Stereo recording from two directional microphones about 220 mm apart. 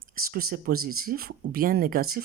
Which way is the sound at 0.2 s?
40° right (ahead or behind).